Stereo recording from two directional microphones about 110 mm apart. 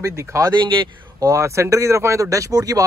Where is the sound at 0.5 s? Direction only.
45° right (ahead or behind).